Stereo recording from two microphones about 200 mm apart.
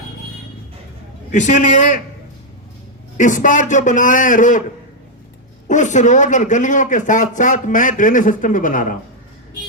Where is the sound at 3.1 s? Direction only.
40° left (ahead or behind).